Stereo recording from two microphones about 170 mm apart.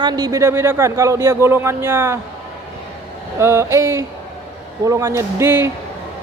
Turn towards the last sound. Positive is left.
turn(degrees=-15)  # may be behind; listen again after turning